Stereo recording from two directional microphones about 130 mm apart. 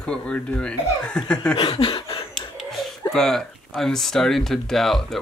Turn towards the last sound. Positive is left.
turn(degrees=0)  # may be behind; listen again after turning